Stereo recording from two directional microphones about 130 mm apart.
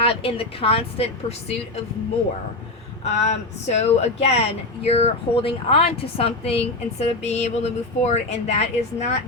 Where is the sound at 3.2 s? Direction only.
55° left (ahead or behind).